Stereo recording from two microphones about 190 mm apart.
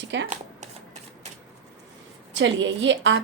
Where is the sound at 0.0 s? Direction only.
70° right (ahead or behind).